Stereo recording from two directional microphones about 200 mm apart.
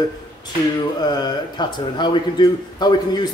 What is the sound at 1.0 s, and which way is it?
A man's voice, 20° left (ahead or behind).